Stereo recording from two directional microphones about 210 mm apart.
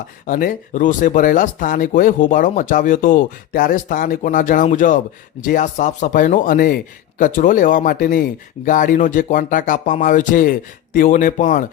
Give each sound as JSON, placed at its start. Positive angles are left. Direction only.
{"t": 0.3, "sound": "speech", "side_deg": 40}